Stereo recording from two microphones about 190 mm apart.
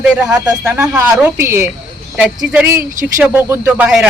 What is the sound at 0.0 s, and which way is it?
A man's voice, 5° right (ahead or behind).